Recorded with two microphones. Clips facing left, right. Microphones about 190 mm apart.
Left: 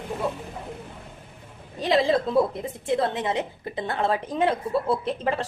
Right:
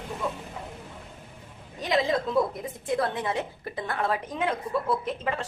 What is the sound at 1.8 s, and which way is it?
A woman's voice, 30° left (ahead or behind).